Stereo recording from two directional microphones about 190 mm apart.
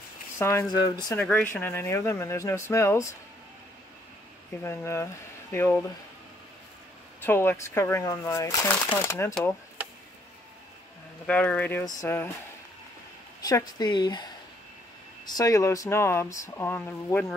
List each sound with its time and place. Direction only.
0.4 s speech: 15° left (ahead or behind)
4.6 s speech: 15° left (ahead or behind)
7.2 s speech: 10° left (ahead or behind)
11.2 s speech: 5° left (ahead or behind)
13.4 s speech: 20° left (ahead or behind)